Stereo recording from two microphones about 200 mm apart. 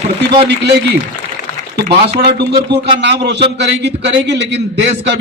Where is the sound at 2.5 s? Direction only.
25° right (ahead or behind).